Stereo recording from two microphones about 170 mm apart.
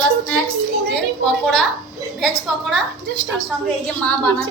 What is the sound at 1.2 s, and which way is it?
Speech, centre (ahead or behind).